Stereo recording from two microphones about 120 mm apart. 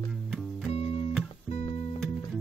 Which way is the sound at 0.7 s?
55° left (ahead or behind).